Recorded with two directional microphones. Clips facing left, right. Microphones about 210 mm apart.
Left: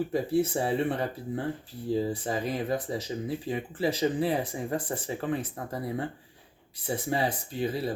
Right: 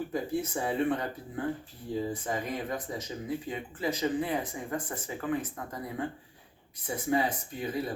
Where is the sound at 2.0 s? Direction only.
35° left (ahead or behind).